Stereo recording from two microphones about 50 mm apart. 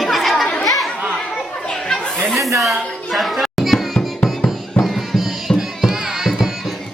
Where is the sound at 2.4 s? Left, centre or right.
Right.